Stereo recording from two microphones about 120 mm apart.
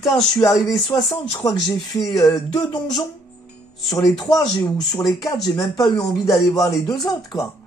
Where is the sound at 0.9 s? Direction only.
40° left (ahead or behind).